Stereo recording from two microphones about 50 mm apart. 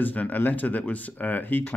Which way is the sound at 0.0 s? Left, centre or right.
Left.